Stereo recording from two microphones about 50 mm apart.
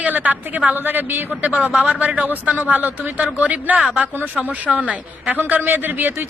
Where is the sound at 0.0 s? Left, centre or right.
Right.